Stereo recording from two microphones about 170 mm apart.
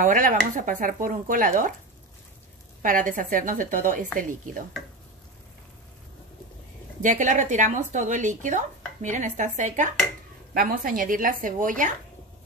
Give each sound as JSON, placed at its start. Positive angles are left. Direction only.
{"t": 0.0, "sound": "speech", "side_deg": -50}
{"t": 2.8, "sound": "speech", "side_deg": -50}
{"t": 7.0, "sound": "speech", "side_deg": -45}
{"t": 10.5, "sound": "speech", "side_deg": -60}